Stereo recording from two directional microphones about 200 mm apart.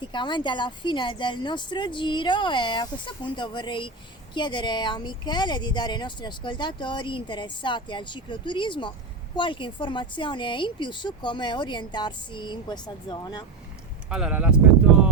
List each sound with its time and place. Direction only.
0.0 s speech: 25° left (ahead or behind)
14.1 s speech: 5° right (ahead or behind)